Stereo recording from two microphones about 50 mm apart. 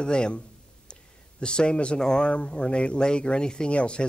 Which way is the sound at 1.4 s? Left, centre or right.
Centre.